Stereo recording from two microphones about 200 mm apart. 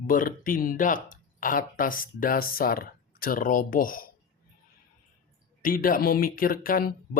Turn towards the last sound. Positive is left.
turn(degrees=45)  # may be behind; listen again after turning